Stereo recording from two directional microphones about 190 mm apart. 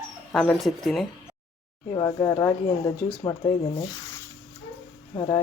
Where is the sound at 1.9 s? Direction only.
20° left (ahead or behind).